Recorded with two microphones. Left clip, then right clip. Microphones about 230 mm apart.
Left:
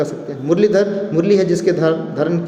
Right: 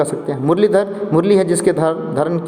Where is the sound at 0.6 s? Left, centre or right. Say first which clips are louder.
Left 2 dB; centre.